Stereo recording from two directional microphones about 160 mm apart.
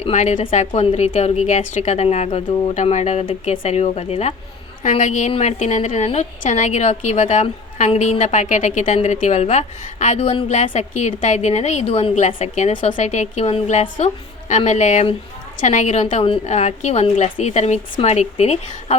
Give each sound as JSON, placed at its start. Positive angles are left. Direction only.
{"t": 0.0, "sound": "a woman's voice", "side_deg": 45}